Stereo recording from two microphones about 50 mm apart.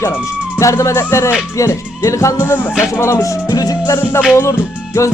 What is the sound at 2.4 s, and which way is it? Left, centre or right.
Music, left.